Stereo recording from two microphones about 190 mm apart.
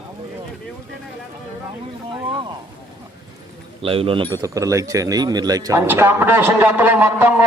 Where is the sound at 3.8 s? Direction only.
30° right (ahead or behind).